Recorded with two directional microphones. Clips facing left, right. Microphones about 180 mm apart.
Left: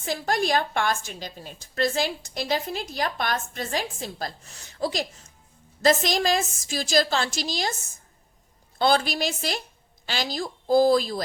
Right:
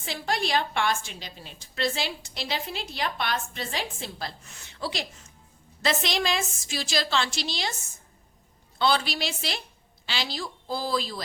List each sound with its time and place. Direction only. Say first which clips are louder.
0.0 s a woman's voice: left 4 dB; 45° left (ahead or behind)